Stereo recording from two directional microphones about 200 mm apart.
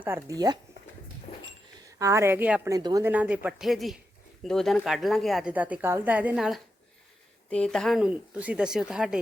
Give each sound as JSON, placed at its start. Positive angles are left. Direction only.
{"t": 0.0, "sound": "a woman's voice", "side_deg": -15}
{"t": 2.0, "sound": "a woman's voice", "side_deg": -15}